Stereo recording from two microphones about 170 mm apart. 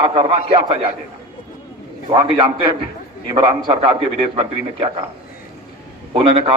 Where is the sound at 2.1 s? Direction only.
30° right (ahead or behind).